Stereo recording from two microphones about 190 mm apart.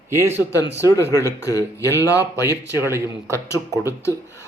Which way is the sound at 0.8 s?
15° left (ahead or behind).